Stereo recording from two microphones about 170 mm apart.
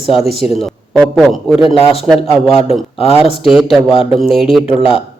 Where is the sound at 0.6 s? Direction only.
Centre (ahead or behind).